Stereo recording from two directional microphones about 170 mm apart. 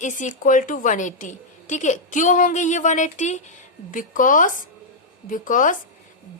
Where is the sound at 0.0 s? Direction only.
50° left (ahead or behind).